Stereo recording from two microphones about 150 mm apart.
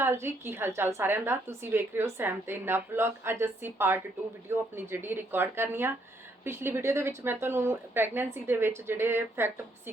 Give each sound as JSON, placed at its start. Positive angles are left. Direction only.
{"t": 0.0, "sound": "a woman's voice", "side_deg": -15}